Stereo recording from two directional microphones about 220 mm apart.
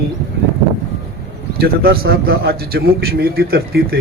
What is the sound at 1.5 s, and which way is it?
Speech, 45° right (ahead or behind).